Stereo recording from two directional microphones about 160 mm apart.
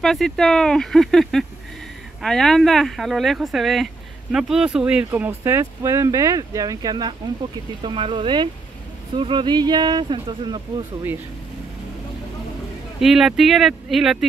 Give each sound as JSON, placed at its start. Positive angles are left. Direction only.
{"t": 0.0, "sound": "speech", "side_deg": 0}
{"t": 13.0, "sound": "speech", "side_deg": 0}